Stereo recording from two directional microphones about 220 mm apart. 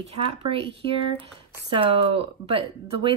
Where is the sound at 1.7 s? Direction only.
25° right (ahead or behind).